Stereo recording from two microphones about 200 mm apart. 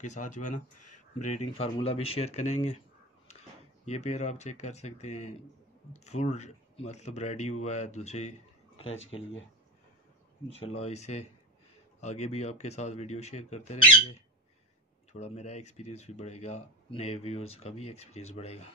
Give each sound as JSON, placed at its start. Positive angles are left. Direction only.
{"t": 0.0, "sound": "speech", "side_deg": 35}
{"t": 3.8, "sound": "speech", "side_deg": 35}
{"t": 9.0, "sound": "speech", "side_deg": 70}
{"t": 10.8, "sound": "speech", "side_deg": 35}
{"t": 15.1, "sound": "speech", "side_deg": 35}